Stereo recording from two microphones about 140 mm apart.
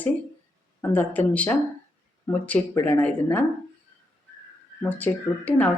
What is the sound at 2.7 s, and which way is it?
Speech, 25° left (ahead or behind).